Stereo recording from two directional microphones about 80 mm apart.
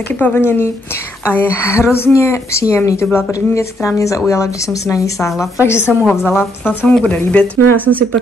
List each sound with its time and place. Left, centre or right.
0.2 s a woman's voice: left